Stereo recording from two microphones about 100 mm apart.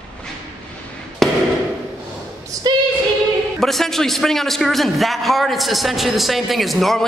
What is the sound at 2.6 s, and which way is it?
Singing, 45° right (ahead or behind).